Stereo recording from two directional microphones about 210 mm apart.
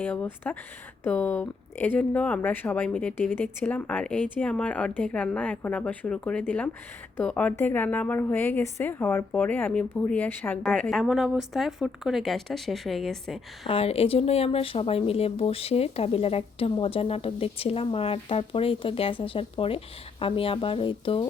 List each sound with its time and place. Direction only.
0.0 s a woman's voice: 5° left (ahead or behind)
13.7 s speech: 30° left (ahead or behind)